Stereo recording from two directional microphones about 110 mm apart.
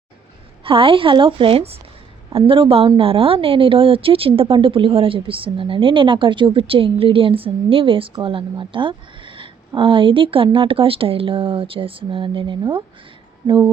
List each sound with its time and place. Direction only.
0.6 s a woman's voice: 55° right (ahead or behind)